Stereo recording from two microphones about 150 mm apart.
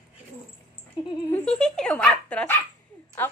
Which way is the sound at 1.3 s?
5° left (ahead or behind).